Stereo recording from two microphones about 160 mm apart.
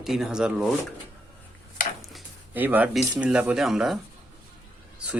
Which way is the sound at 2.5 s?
10° right (ahead or behind).